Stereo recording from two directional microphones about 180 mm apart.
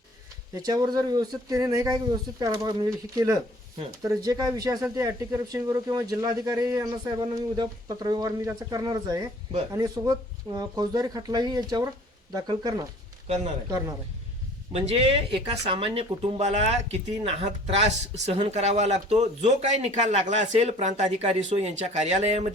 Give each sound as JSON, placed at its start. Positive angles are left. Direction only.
{"t": 0.5, "sound": "speech", "side_deg": -20}
{"t": 14.7, "sound": "speech", "side_deg": -35}